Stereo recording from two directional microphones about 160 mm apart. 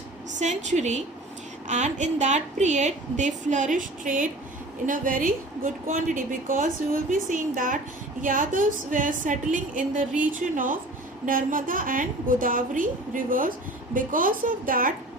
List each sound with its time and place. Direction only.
0.3 s a woman's voice: 50° right (ahead or behind)